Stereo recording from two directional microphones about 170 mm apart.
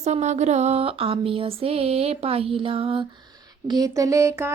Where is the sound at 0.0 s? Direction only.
45° right (ahead or behind).